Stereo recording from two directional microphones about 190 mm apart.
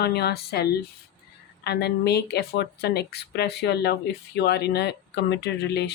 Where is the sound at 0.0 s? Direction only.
60° left (ahead or behind).